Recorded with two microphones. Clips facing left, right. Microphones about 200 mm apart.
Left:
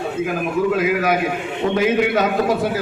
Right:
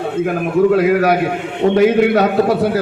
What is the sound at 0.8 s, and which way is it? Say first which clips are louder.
Speech: right 6 dB; 65° right (ahead or behind).